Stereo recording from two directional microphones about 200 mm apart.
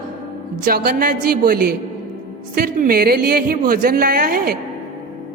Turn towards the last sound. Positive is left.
turn(degrees=-45)  # may be behind; listen again after turning